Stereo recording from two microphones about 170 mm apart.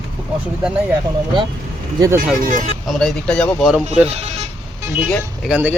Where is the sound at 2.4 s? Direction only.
50° right (ahead or behind).